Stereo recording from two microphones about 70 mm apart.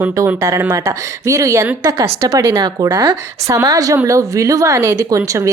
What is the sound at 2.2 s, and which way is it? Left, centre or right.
A woman's voice, right.